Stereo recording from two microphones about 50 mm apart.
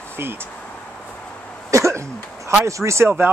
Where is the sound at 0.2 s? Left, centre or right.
Right.